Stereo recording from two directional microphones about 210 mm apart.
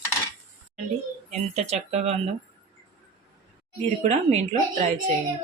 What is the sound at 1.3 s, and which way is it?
Speech, 30° right (ahead or behind).